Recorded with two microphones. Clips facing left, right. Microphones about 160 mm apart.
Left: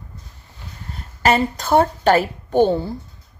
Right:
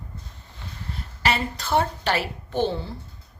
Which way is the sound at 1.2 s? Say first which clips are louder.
Left 8 dB; 45° left (ahead or behind).